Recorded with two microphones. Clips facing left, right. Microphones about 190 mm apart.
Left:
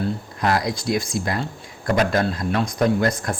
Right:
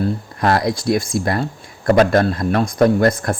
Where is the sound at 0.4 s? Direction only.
55° right (ahead or behind).